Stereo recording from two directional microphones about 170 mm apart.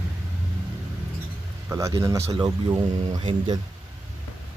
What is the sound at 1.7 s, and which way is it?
Speech, 20° right (ahead or behind).